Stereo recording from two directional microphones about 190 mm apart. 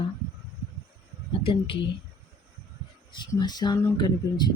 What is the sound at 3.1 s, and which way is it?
Speech, 20° left (ahead or behind).